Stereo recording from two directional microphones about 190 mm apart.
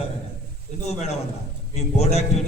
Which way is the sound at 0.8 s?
35° left (ahead or behind).